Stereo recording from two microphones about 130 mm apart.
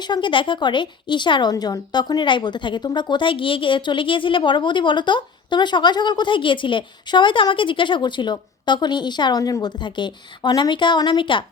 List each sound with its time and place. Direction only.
0.0 s a woman's voice: 35° left (ahead or behind)